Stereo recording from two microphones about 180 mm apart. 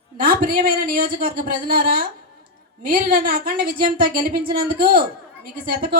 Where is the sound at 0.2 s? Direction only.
55° right (ahead or behind).